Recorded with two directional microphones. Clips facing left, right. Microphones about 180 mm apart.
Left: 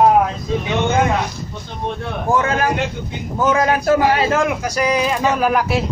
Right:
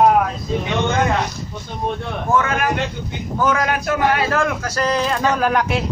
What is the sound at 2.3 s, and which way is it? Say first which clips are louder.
A man's voice: left 1 dB; 30° left (ahead or behind).